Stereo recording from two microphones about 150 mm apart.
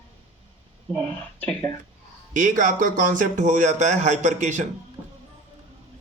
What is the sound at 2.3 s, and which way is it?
A man's voice, 60° right (ahead or behind).